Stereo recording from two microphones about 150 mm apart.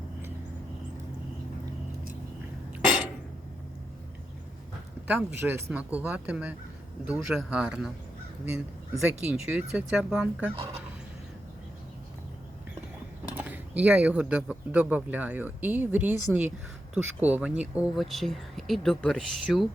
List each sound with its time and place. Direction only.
2.8 s a sound: 5° right (ahead or behind)
5.0 s speech: 10° right (ahead or behind)
9.0 s speech: 5° right (ahead or behind)
10.5 s speech: 40° right (ahead or behind)
13.3 s speech: 10° right (ahead or behind)
17.9 s speech: centre (ahead or behind)